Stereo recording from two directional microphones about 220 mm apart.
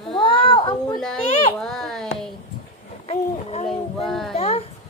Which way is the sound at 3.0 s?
30° left (ahead or behind).